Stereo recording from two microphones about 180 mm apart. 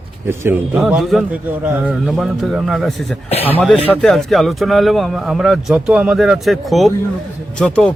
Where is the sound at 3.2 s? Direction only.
35° left (ahead or behind).